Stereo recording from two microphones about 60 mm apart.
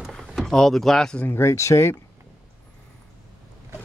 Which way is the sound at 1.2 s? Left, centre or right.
Left.